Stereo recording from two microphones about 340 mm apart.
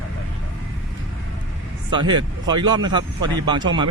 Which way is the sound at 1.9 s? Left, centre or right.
Centre.